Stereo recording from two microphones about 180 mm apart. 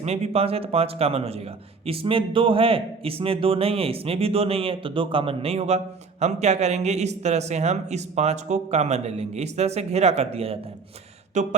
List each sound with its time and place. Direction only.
0.0 s a man's voice: 35° right (ahead or behind)